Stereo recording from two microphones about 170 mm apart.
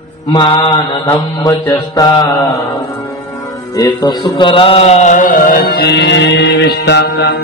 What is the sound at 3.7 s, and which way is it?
Music, 25° left (ahead or behind).